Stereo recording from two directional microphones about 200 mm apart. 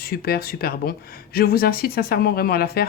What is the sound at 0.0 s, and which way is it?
Speech, 50° left (ahead or behind).